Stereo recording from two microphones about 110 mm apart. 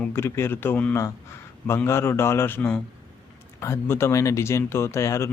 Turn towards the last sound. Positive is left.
turn(degrees=25)  # may be behind; listen again after turning